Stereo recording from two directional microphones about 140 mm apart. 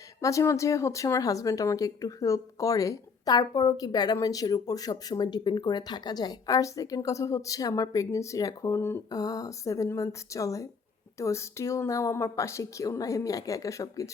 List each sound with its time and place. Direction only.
0.2 s speech: 20° left (ahead or behind)